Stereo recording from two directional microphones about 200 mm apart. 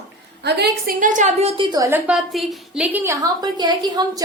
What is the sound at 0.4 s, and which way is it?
A woman's voice, 55° right (ahead or behind).